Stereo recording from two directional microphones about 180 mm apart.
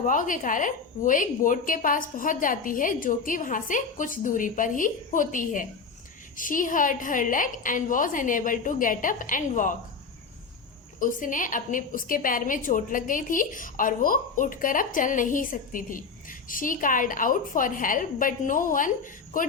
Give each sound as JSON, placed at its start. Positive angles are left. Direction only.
{"t": 0.0, "sound": "a woman's voice", "side_deg": 45}
{"t": 11.0, "sound": "a woman's voice", "side_deg": 50}